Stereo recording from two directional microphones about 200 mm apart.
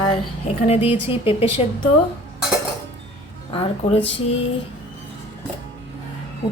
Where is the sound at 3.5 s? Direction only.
25° left (ahead or behind).